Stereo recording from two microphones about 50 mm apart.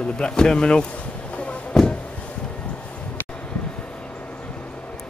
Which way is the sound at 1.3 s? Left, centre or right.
Left.